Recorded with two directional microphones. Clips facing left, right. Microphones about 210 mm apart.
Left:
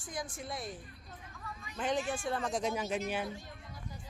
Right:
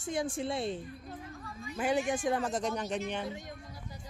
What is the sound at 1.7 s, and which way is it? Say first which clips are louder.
Speech: right 4 dB; 10° right (ahead or behind).